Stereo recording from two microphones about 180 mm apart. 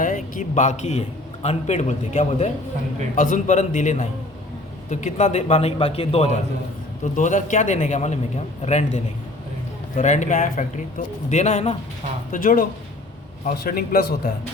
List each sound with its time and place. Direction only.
0.0 s a man's voice: 45° left (ahead or behind)
7.0 s a man's voice: 45° left (ahead or behind)
12.3 s a man's voice: 50° left (ahead or behind)
13.7 s a man's voice: 55° left (ahead or behind)